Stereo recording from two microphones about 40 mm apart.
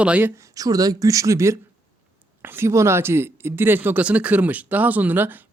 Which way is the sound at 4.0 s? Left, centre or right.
Right.